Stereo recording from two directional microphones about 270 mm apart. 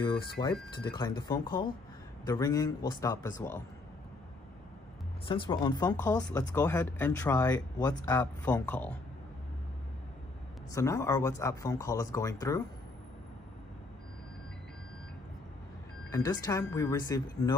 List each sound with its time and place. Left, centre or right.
0.0 s speech: centre
5.3 s speech: centre
10.7 s speech: centre
16.1 s speech: centre